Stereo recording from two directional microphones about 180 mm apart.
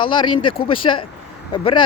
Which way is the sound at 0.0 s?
25° left (ahead or behind).